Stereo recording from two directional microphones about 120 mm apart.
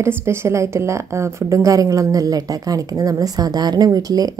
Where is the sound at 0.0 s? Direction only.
20° right (ahead or behind).